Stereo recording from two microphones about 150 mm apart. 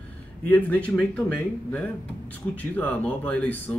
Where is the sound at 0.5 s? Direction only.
10° left (ahead or behind).